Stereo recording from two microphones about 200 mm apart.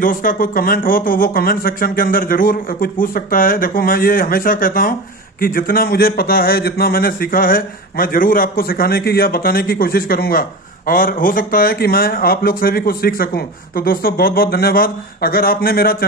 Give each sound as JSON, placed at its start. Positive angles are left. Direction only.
{"t": 0.0, "sound": "speech", "side_deg": 45}